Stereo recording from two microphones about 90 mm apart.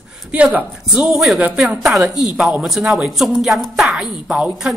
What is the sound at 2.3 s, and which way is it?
Speech, 15° right (ahead or behind).